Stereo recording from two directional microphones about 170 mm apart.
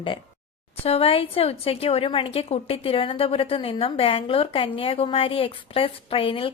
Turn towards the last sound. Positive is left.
turn(degrees=30)  # may be behind; listen again after turning